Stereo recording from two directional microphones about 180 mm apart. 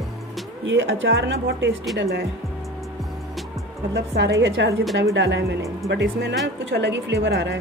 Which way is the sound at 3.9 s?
70° right (ahead or behind).